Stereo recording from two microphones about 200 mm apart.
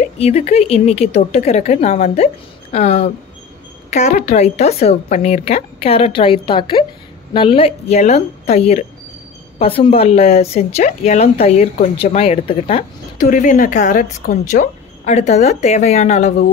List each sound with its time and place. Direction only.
0.2 s a woman's voice: 30° left (ahead or behind)
13.2 s speech: 40° left (ahead or behind)